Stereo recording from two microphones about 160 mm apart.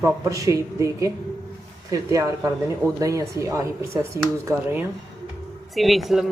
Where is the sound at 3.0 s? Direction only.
20° right (ahead or behind).